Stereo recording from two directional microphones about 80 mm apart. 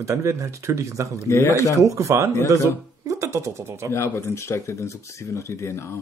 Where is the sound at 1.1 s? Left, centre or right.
Left.